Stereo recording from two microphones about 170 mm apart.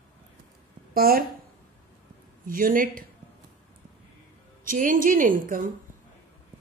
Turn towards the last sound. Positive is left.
turn(degrees=-55)  # may be behind; listen again after turning